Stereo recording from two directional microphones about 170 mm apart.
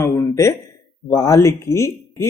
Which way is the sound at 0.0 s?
15° left (ahead or behind).